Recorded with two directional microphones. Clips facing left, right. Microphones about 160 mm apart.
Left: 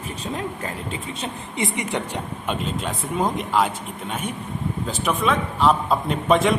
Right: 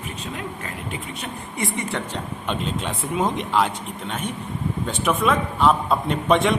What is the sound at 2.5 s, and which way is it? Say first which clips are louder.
A man's voice: even; centre (ahead or behind).